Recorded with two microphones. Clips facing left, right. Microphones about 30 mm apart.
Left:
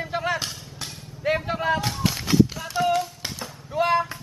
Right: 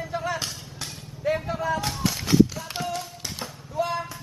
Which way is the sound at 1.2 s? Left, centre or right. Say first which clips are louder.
Left 2 dB; left.